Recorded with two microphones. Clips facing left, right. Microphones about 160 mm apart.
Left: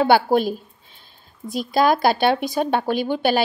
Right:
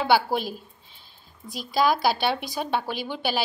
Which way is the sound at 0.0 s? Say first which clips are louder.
Left 6 dB; 50° left (ahead or behind).